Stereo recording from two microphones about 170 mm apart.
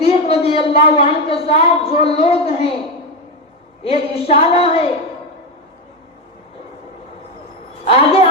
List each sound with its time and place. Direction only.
0.0 s a woman's voice: 35° left (ahead or behind)
3.8 s a woman's voice: 35° left (ahead or behind)
7.9 s a woman's voice: 35° left (ahead or behind)